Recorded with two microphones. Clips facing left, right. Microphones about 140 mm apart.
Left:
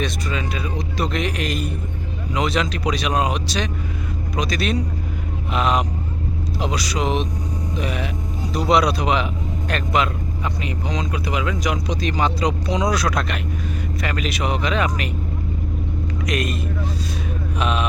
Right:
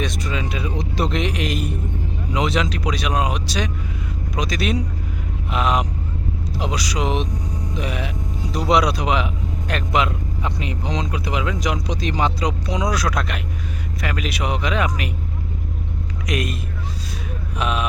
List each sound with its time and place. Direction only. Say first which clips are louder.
0.0 s a man's voice: even; 15° right (ahead or behind)
16.2 s speech: even; 10° right (ahead or behind)
17.6 s speech: even; 5° right (ahead or behind)